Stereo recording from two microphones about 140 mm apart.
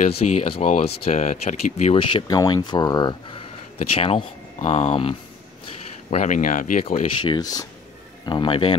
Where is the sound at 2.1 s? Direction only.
30° left (ahead or behind); by 4.9 s 50° left (ahead or behind).